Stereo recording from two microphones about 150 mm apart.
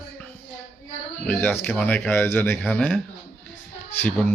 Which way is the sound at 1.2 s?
10° left (ahead or behind).